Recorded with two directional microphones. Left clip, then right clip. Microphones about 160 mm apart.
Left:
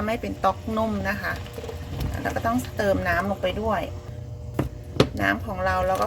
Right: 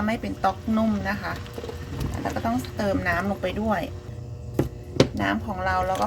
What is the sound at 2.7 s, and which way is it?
Speech, 35° left (ahead or behind).